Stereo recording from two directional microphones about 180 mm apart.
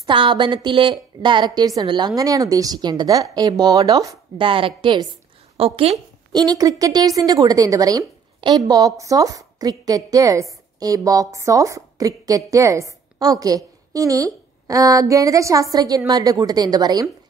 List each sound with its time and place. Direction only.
0.0 s a woman's voice: 25° right (ahead or behind)
6.4 s a woman's voice: 20° right (ahead or behind)